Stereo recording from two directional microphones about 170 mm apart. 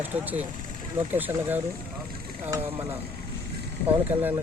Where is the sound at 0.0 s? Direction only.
10° right (ahead or behind).